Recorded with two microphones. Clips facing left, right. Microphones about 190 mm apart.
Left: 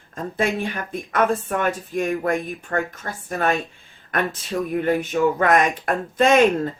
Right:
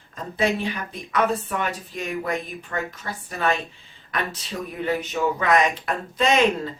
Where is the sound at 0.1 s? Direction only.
50° left (ahead or behind).